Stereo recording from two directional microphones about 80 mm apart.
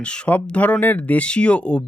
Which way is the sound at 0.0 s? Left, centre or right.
Centre.